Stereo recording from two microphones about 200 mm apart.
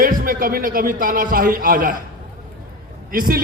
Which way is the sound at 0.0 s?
45° right (ahead or behind).